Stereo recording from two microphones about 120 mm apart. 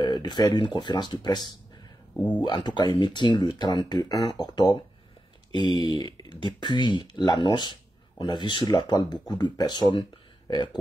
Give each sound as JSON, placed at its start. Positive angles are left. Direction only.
{"t": 0.0, "sound": "speech", "side_deg": 35}
{"t": 2.1, "sound": "speech", "side_deg": 10}
{"t": 2.4, "sound": "speech", "side_deg": 40}